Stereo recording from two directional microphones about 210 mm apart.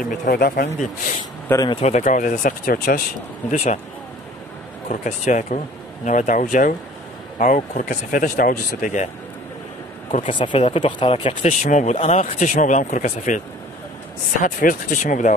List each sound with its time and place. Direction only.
0.0 s speech: 40° left (ahead or behind)
1.5 s speech: 15° left (ahead or behind)
1.8 s speech: 35° left (ahead or behind)
4.8 s speech: 35° left (ahead or behind)
10.3 s speech: 25° left (ahead or behind)
14.4 s speech: 40° left (ahead or behind)